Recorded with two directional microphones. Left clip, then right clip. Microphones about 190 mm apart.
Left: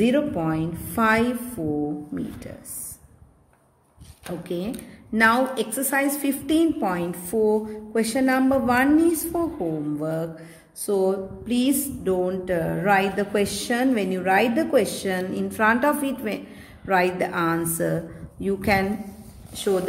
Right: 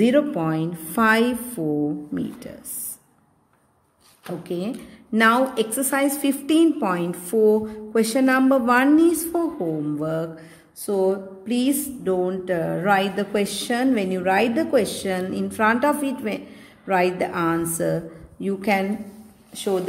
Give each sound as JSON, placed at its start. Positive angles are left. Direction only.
{"t": 0.0, "sound": "a woman's voice", "side_deg": -35}
{"t": 4.4, "sound": "a woman's voice", "side_deg": -25}
{"t": 9.9, "sound": "music", "side_deg": -25}